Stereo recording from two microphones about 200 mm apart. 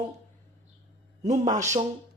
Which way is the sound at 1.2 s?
35° right (ahead or behind).